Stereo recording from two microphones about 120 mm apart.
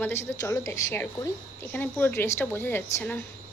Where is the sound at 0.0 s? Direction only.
20° left (ahead or behind).